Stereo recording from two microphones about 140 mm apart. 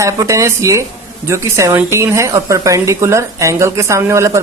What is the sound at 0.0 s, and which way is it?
Speech, 20° right (ahead or behind).